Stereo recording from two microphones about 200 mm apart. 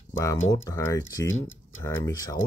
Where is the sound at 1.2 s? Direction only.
75° left (ahead or behind).